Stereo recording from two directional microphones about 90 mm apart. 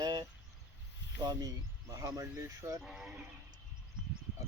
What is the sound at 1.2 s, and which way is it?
Speech, 45° right (ahead or behind).